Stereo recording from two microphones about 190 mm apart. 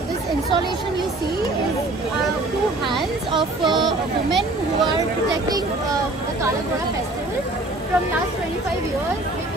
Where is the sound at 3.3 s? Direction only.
25° right (ahead or behind).